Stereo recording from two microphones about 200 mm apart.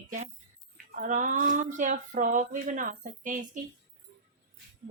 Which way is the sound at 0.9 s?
40° right (ahead or behind).